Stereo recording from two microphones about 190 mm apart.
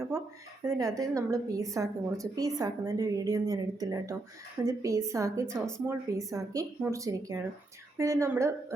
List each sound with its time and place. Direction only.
0.8 s a woman's voice: 20° right (ahead or behind)
5.5 s speech: 5° left (ahead or behind)
5.8 s a woman's voice: 15° right (ahead or behind)